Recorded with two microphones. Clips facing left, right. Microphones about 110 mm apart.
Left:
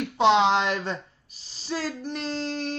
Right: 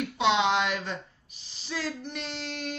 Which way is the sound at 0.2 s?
40° left (ahead or behind).